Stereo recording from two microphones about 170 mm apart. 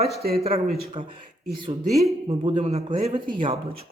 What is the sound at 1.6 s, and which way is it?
Speech, 20° right (ahead or behind).